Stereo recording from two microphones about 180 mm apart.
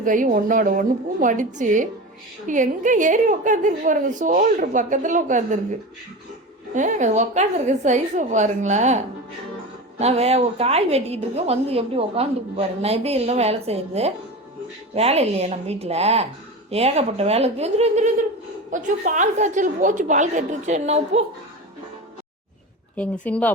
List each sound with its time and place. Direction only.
0.0 s speech: 45° right (ahead or behind)
6.7 s a woman's voice: 40° right (ahead or behind)
10.0 s a woman's voice: 35° right (ahead or behind)
23.0 s speech: 5° left (ahead or behind)